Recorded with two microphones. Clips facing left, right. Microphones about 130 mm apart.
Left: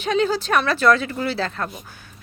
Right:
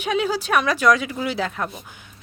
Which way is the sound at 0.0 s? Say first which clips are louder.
Left 2 dB; 10° right (ahead or behind).